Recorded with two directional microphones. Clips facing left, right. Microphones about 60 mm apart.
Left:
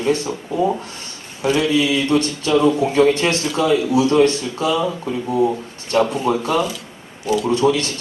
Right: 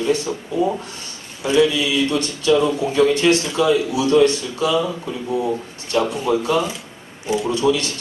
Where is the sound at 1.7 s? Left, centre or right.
Left.